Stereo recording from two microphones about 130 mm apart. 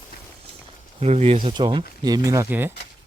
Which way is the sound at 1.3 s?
35° right (ahead or behind).